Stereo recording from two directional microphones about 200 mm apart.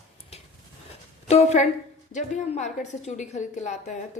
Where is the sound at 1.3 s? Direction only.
35° left (ahead or behind).